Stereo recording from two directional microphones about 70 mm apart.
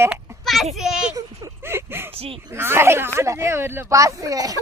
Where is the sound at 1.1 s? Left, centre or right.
Right.